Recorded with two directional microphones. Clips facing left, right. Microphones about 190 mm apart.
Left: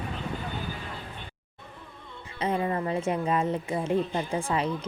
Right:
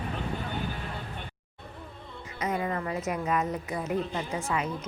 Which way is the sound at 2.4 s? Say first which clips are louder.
Left 3 dB; 30° left (ahead or behind).